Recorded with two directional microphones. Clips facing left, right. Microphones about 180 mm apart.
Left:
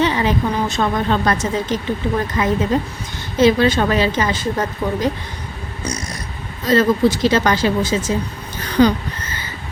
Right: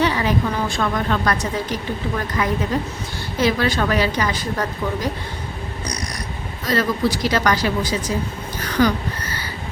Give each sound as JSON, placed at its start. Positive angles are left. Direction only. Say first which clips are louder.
{"t": 0.0, "sound": "a woman's voice", "louder": "left 2 dB", "side_deg": 25}
{"t": 5.8, "sound": "cat", "louder": "left 5 dB", "side_deg": 25}
{"t": 6.7, "sound": "a woman's voice", "louder": "left 6 dB", "side_deg": 25}